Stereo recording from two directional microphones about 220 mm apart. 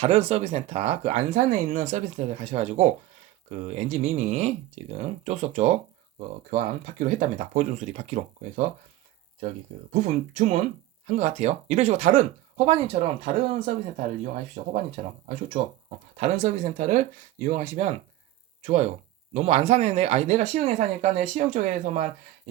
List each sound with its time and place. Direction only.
0.0 s speech: 30° right (ahead or behind)
9.9 s speech: 35° right (ahead or behind)